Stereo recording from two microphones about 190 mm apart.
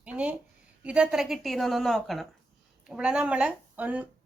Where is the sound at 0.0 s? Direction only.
5° right (ahead or behind).